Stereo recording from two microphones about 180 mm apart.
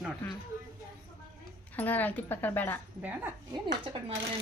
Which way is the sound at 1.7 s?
10° left (ahead or behind).